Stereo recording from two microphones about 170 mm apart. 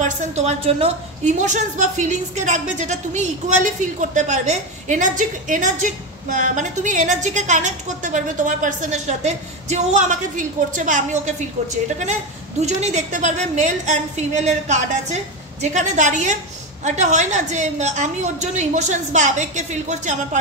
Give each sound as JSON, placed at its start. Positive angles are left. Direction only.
{"t": 0.0, "sound": "a woman's voice", "side_deg": -45}